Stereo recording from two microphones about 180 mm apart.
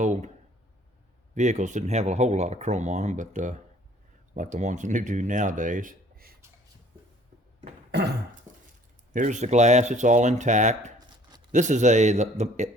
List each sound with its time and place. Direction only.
0.0 s speech: 45° right (ahead or behind)
1.4 s speech: 40° right (ahead or behind)
7.9 s dog: 70° right (ahead or behind)
8.5 s chink: 15° right (ahead or behind)
9.1 s speech: 45° right (ahead or behind)